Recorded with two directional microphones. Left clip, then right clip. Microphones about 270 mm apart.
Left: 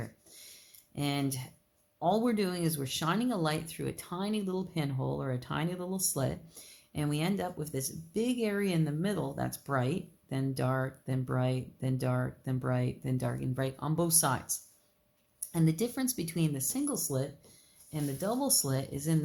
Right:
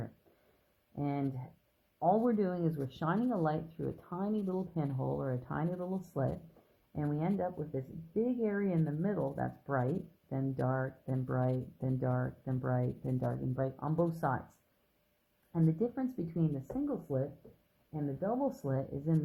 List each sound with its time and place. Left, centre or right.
0.9 s speech: left
15.5 s speech: left